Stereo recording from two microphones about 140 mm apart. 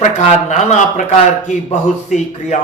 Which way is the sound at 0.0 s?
60° left (ahead or behind).